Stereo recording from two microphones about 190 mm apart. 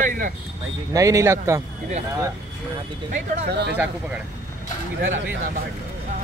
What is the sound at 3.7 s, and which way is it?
Speech, 10° right (ahead or behind).